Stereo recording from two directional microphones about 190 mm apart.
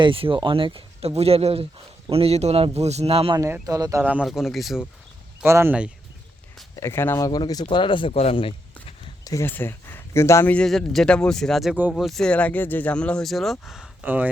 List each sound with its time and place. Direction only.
0.0 s speech: 25° right (ahead or behind)
3.4 s speech: 15° right (ahead or behind)
4.0 s a man's voice: 5° right (ahead or behind)
5.4 s speech: 10° right (ahead or behind)
6.7 s speech: 15° left (ahead or behind)
7.7 s a sound: 25° left (ahead or behind)
9.3 s a man's voice: 10° left (ahead or behind); by 14.3 s 10° right (ahead or behind)